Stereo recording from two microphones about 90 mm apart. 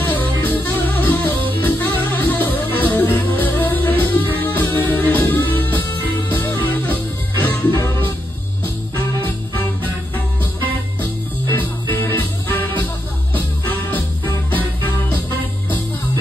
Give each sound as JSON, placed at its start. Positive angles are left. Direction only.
{"t": 0.0, "sound": "music", "side_deg": 20}
{"t": 11.5, "sound": "music", "side_deg": 20}